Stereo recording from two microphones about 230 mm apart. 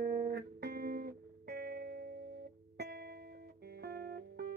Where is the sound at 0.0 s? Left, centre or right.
Right.